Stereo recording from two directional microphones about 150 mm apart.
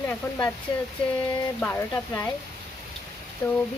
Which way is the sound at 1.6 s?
15° left (ahead or behind).